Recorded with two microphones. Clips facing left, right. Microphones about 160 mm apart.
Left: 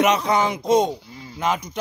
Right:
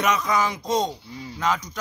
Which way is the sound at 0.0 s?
30° left (ahead or behind).